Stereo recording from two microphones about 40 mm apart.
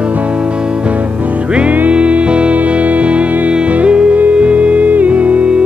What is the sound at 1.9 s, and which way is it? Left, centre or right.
Music, right.